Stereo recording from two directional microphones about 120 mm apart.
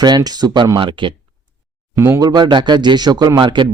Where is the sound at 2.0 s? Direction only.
20° right (ahead or behind).